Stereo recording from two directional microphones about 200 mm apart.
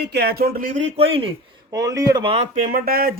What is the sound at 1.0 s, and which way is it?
Speech, 25° right (ahead or behind).